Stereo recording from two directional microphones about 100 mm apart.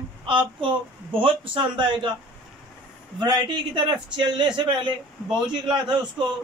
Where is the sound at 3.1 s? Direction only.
50° right (ahead or behind).